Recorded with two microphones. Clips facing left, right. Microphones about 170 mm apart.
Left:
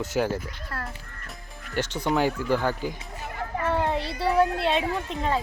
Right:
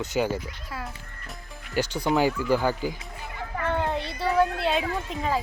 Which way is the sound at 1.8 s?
35° right (ahead or behind).